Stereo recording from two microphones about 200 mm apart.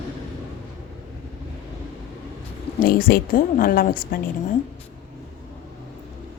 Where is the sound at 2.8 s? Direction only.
45° left (ahead or behind).